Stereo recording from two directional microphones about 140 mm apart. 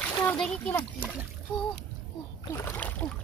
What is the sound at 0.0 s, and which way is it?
Splash, 15° left (ahead or behind).